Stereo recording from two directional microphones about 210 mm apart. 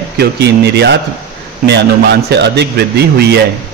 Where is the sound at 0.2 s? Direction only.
50° right (ahead or behind).